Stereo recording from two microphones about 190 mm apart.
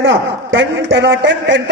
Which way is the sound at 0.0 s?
75° right (ahead or behind).